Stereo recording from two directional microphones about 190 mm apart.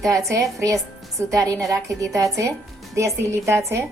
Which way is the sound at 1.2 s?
15° right (ahead or behind).